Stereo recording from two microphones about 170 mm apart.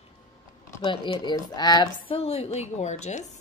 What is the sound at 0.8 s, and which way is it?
A woman's voice, 30° left (ahead or behind).